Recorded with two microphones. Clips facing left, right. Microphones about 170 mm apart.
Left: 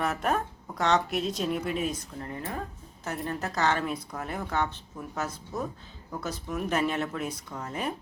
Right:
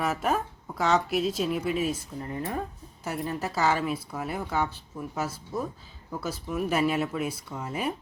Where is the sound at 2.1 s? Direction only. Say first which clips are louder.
Right 3 dB; 20° right (ahead or behind).